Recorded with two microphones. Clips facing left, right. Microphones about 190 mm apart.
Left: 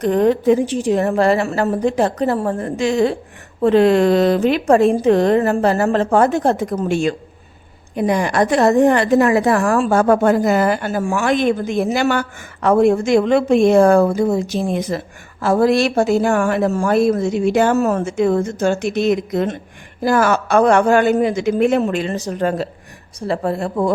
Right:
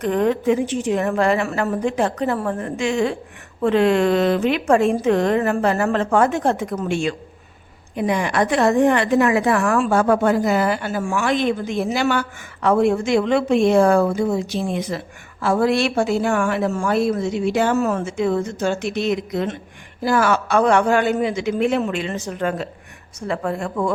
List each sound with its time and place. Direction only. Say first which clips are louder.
0.0 s a woman's voice: left 4 dB; 35° left (ahead or behind)